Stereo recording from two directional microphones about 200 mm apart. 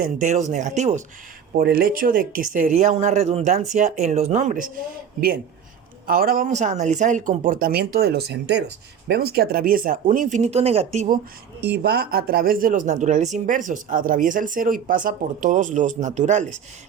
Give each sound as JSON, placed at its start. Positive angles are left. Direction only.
{"t": 0.0, "sound": "speech", "side_deg": -40}
{"t": 1.5, "sound": "speech", "side_deg": -50}
{"t": 6.1, "sound": "speech", "side_deg": -45}
{"t": 11.6, "sound": "speech", "side_deg": -55}